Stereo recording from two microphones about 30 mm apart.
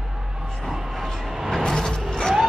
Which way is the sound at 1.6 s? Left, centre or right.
Centre.